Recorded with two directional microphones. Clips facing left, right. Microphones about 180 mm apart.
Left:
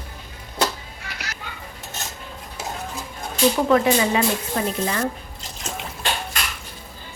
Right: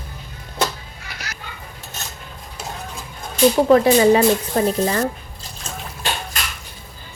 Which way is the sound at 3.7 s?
35° right (ahead or behind).